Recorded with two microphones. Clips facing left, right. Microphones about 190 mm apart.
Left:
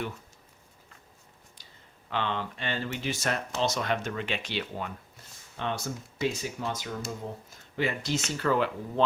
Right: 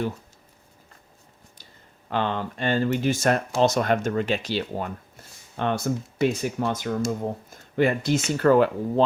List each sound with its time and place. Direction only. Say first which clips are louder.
2.0 s speech: right 5 dB; 45° right (ahead or behind)
5.5 s speech: right 8 dB; 55° right (ahead or behind)